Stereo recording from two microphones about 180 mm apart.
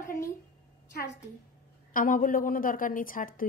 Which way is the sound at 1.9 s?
50° left (ahead or behind).